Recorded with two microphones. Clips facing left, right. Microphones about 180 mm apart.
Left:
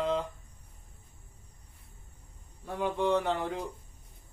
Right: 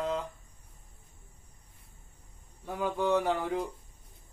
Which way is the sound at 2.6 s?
5° right (ahead or behind).